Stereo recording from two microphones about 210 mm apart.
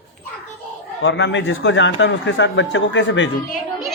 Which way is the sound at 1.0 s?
60° left (ahead or behind).